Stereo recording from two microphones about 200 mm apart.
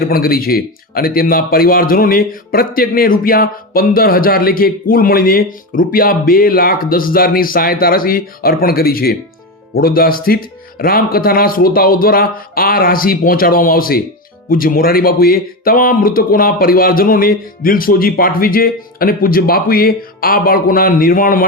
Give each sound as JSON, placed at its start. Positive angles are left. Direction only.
{"t": 0.0, "sound": "a man's voice", "side_deg": 50}